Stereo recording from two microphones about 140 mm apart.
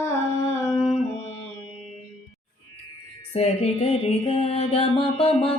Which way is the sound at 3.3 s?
45° left (ahead or behind).